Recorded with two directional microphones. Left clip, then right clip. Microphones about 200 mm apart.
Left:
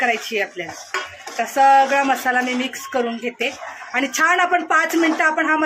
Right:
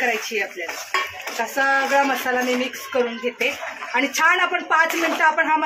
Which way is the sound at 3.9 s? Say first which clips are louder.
Left 1 dB; 60° left (ahead or behind).